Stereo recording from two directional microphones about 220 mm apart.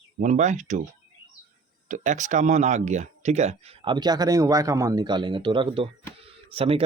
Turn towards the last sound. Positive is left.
turn(degrees=-25)  # may be behind; listen again after turning